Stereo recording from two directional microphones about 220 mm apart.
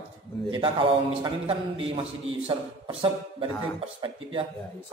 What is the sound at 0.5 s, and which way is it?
A man's voice, 20° right (ahead or behind).